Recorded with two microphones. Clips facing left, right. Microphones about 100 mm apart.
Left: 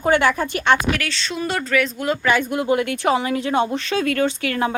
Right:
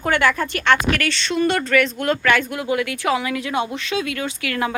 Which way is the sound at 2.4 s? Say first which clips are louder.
Left 3 dB; 30° left (ahead or behind).